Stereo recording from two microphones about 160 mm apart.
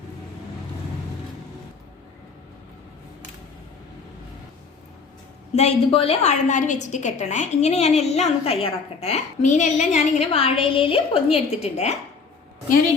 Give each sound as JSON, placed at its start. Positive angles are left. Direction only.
{"t": 5.5, "sound": "a woman's voice", "side_deg": 40}